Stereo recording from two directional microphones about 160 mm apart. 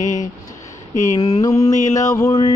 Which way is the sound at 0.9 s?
20° left (ahead or behind).